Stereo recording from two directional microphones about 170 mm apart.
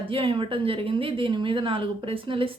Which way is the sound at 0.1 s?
30° right (ahead or behind).